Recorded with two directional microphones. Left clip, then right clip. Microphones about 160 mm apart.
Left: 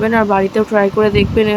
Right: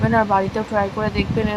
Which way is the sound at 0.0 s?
30° left (ahead or behind).